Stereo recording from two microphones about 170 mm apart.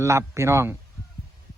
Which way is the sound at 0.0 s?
15° right (ahead or behind).